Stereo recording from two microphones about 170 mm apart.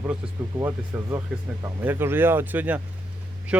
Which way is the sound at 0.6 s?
15° right (ahead or behind).